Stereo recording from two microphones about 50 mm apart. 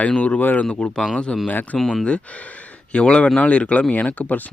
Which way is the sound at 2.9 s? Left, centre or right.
Left.